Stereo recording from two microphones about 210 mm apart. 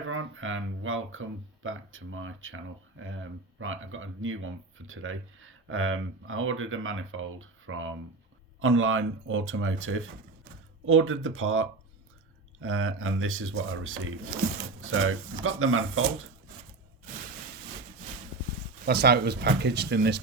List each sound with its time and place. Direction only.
0.1 s speech: 70° right (ahead or behind)
18.9 s speech: 50° right (ahead or behind)